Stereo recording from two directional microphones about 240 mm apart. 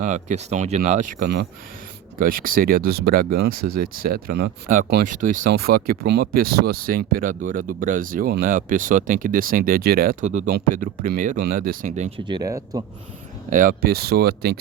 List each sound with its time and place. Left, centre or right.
0.0 s speech: right; by 12.8 s centre
13.5 s speech: right